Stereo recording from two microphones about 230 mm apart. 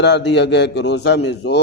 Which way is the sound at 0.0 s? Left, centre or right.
Left.